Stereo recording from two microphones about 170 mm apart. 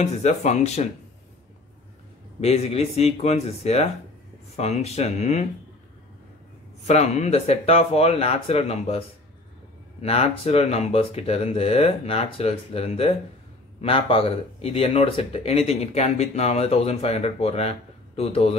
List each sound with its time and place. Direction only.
0.0 s speech: 40° left (ahead or behind)
2.4 s speech: 35° left (ahead or behind)
6.9 s speech: 40° left (ahead or behind)
10.0 s speech: 35° left (ahead or behind)